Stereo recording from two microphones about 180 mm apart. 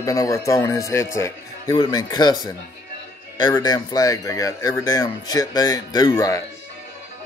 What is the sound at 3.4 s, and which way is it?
Speech, 20° left (ahead or behind).